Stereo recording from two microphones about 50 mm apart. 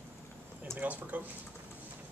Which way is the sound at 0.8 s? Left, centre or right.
Right.